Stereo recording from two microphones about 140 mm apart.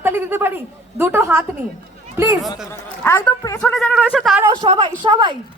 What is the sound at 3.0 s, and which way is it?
Speech, 20° left (ahead or behind).